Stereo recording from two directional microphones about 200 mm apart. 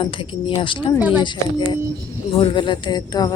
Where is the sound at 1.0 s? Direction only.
10° right (ahead or behind).